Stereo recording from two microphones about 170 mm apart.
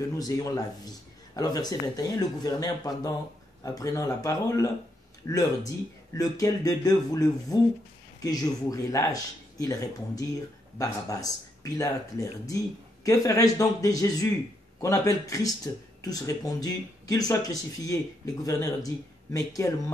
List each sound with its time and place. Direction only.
0.1 s speech: 20° left (ahead or behind)